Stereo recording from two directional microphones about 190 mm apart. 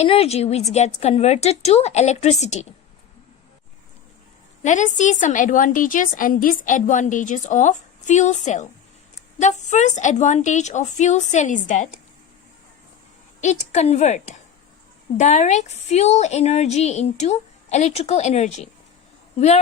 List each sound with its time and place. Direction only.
0.0 s a woman's voice: 30° left (ahead or behind)
4.6 s a woman's voice: 40° left (ahead or behind)
13.4 s a woman's voice: 40° left (ahead or behind)